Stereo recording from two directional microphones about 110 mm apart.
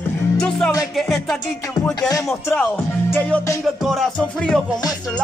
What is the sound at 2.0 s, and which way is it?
Music, 30° left (ahead or behind).